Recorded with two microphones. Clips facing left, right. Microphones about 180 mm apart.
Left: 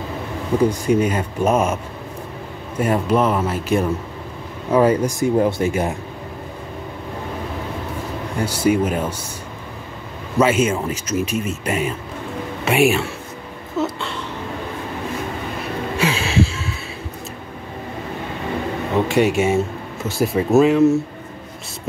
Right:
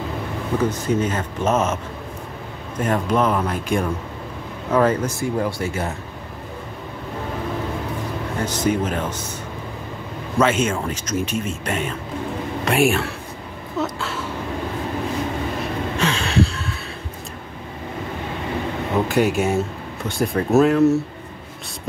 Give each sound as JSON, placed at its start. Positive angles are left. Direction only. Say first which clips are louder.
{"t": 0.6, "sound": "speech", "louder": "left 4 dB", "side_deg": 10}
{"t": 2.8, "sound": "speech", "louder": "left 2 dB", "side_deg": 10}
{"t": 8.4, "sound": "speech", "louder": "left 4 dB", "side_deg": 10}
{"t": 10.3, "sound": "speech", "louder": "left 2 dB", "side_deg": 10}
{"t": 13.7, "sound": "a sound", "louder": "left 2 dB", "side_deg": 0}
{"t": 16.0, "sound": "a sound", "louder": "left 1 dB", "side_deg": 5}
{"t": 19.0, "sound": "speech", "louder": "left 3 dB", "side_deg": 0}